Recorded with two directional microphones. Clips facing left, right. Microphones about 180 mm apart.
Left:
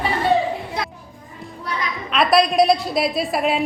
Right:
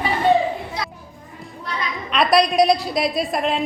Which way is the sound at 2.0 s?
Centre (ahead or behind).